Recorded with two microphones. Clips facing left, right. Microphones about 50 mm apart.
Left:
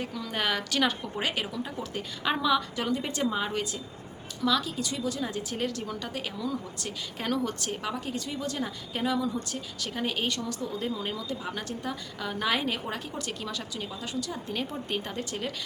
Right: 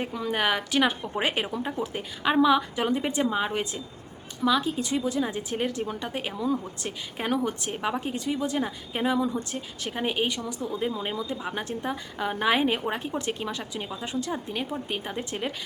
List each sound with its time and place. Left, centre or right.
0.0 s a woman's voice: right
1.8 s a woman's voice: centre
14.5 s a woman's voice: centre